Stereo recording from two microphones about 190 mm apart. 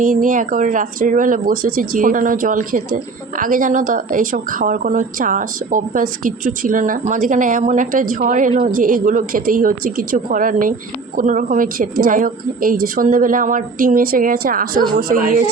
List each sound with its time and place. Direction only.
0.0 s a woman's voice: 45° right (ahead or behind)